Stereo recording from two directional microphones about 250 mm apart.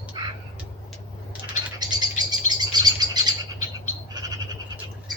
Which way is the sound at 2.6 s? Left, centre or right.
Centre.